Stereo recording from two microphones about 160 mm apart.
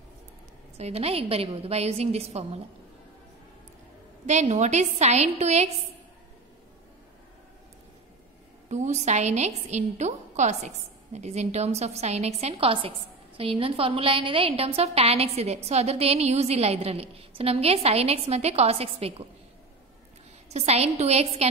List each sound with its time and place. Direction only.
0.7 s a woman's voice: 40° right (ahead or behind)
4.3 s a woman's voice: 45° right (ahead or behind)
8.6 s a woman's voice: 45° right (ahead or behind)
20.4 s a woman's voice: 40° right (ahead or behind)